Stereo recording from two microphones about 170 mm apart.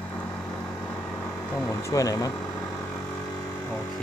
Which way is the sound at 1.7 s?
20° left (ahead or behind).